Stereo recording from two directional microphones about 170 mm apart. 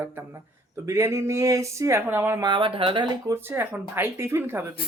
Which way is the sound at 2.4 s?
30° right (ahead or behind).